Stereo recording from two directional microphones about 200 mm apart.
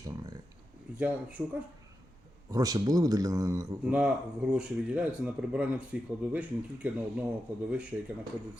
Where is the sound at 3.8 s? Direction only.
5° right (ahead or behind).